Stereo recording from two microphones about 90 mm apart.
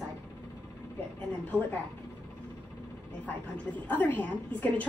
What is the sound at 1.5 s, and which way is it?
Speech, 20° left (ahead or behind).